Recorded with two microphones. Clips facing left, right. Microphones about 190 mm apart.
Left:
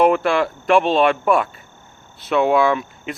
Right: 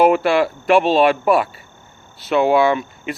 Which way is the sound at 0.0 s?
5° right (ahead or behind).